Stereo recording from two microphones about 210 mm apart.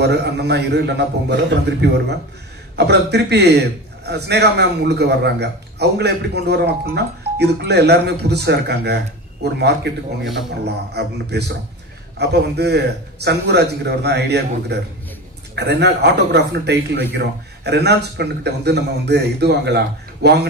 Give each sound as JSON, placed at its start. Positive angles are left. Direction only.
{"t": 0.0, "sound": "a man's voice", "side_deg": -50}